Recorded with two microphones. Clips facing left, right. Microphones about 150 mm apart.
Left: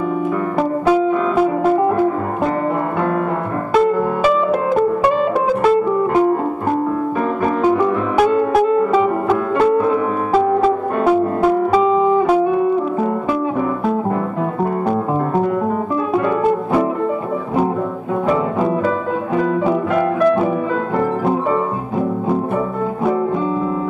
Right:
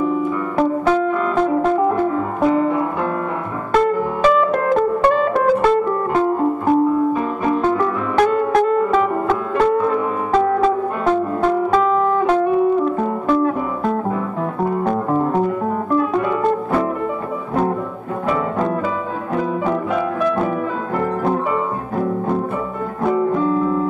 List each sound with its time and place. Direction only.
0.6 s music: 10° left (ahead or behind)
3.7 s music: 5° left (ahead or behind)
7.6 s music: 10° left (ahead or behind)
19.4 s music: 5° left (ahead or behind)
23.0 s music: 5° left (ahead or behind)